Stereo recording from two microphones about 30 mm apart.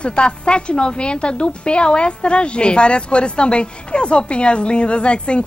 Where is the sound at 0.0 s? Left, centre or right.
Left.